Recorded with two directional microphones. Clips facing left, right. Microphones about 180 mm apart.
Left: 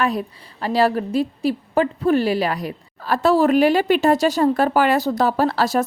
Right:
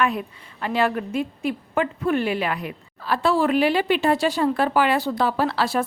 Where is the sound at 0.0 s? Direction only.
35° left (ahead or behind).